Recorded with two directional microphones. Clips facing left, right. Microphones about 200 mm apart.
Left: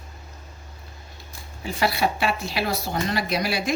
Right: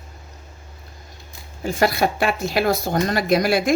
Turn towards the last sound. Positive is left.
turn(degrees=-50)  # may be behind; listen again after turning